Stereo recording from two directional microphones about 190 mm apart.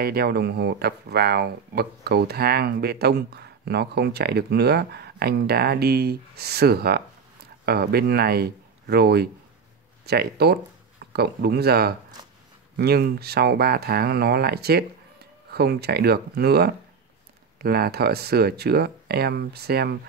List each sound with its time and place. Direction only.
0.0 s speech: 55° right (ahead or behind)